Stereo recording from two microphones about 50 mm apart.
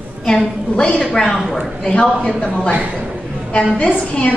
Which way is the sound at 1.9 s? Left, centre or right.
Left.